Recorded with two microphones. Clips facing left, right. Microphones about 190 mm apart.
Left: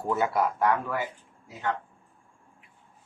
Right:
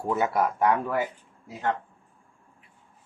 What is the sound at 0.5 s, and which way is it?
Speech, 20° right (ahead or behind).